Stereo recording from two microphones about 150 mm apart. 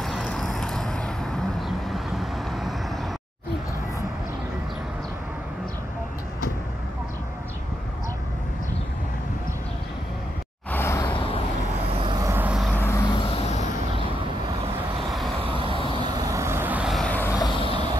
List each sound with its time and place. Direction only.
0.0 s vehicle: 5° left (ahead or behind)
10.7 s a sound: 15° left (ahead or behind)
12.0 s vehicle: 30° right (ahead or behind)
12.3 s vehicle: 10° right (ahead or behind)
12.7 s vehicle: 15° left (ahead or behind)
13.1 s vehicle: 40° left (ahead or behind)
15.5 s vehicle: 35° right (ahead or behind); by 16.9 s 10° right (ahead or behind)
16.9 s vehicle: 10° left (ahead or behind)
17.5 s vehicle: 35° left (ahead or behind)